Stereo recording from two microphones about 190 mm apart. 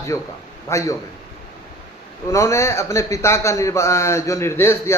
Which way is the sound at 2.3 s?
15° left (ahead or behind).